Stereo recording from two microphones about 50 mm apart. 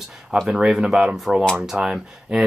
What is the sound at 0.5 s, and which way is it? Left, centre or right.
Speech, centre.